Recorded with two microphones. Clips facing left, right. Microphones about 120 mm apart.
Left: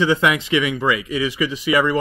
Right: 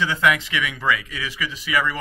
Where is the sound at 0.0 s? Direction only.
20° left (ahead or behind).